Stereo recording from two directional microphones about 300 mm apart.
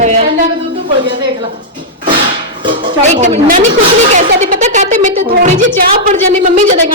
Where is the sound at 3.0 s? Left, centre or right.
Right.